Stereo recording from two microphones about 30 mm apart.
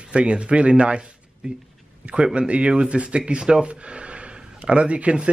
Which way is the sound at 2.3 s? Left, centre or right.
Right.